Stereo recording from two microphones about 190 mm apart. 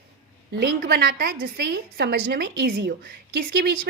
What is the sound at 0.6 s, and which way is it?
A woman's voice, 55° right (ahead or behind).